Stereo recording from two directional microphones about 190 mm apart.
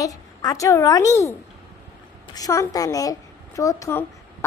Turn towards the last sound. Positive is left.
turn(degrees=10)  # may be behind; listen again after turning